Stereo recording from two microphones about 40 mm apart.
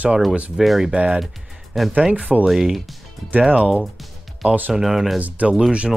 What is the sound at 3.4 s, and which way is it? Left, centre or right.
Speech, right.